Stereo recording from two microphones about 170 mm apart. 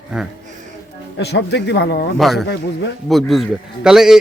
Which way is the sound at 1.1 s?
85° left.